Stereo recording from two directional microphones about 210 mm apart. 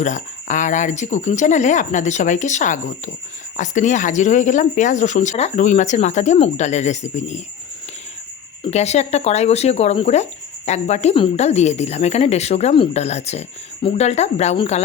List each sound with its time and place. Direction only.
0.0 s speech: 35° left (ahead or behind)
8.6 s speech: 30° left (ahead or behind)